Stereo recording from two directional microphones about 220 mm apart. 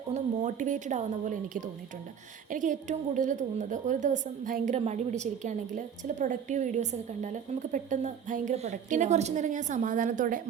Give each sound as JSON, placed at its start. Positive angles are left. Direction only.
{"t": 0.1, "sound": "a woman's voice", "side_deg": -35}